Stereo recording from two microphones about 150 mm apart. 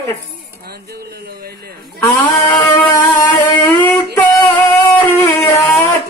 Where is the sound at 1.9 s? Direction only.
15° left (ahead or behind).